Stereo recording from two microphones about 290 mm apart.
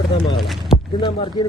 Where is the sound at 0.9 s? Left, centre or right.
Centre.